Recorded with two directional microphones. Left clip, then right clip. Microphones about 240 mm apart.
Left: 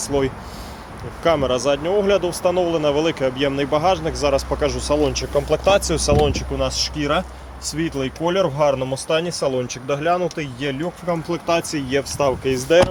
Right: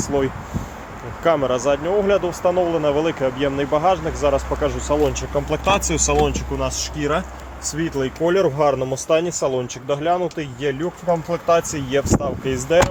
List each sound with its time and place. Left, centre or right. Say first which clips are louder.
0.0 s speech: even; centre